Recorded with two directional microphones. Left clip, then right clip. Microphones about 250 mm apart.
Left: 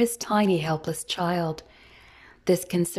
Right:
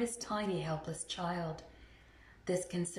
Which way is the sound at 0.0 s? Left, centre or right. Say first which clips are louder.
Left 13 dB; left.